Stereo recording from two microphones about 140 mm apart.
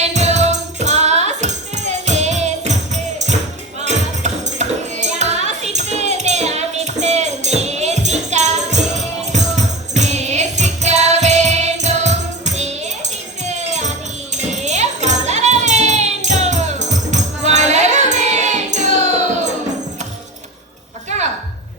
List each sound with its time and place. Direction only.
0.0 s music: 50° right (ahead or behind)